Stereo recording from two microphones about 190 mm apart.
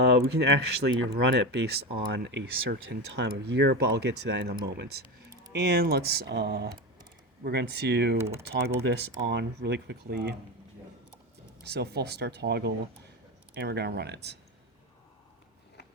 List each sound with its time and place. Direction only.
0.1 s speech: 60° right (ahead or behind)
8.2 s speech: 15° right (ahead or behind)
8.8 s speech: 60° right (ahead or behind)
11.6 s speech: 60° right (ahead or behind)